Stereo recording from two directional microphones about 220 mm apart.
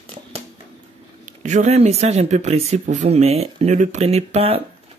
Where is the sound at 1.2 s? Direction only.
35° right (ahead or behind).